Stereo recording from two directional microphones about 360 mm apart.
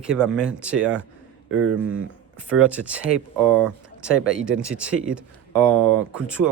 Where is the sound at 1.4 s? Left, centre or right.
Right.